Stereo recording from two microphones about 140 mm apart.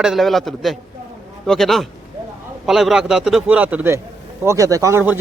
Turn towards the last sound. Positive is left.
turn(degrees=-25)  # may be behind; listen again after turning